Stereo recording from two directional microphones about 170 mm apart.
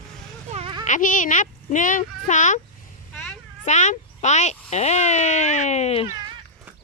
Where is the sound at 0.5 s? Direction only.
30° right (ahead or behind).